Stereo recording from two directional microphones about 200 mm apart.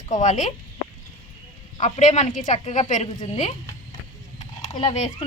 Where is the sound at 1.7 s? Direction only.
35° left (ahead or behind).